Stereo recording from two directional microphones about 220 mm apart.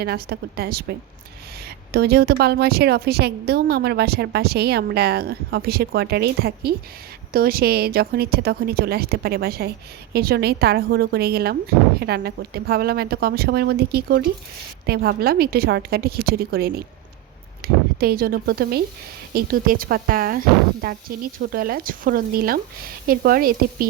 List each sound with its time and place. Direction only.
0.0 s a woman's voice: 45° right (ahead or behind)